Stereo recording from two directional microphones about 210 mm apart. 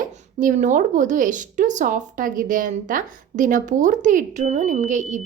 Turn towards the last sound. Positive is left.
turn(degrees=-35)  # may be behind; listen again after turning